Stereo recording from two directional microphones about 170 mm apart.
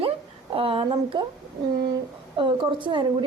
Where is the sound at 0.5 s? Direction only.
35° right (ahead or behind).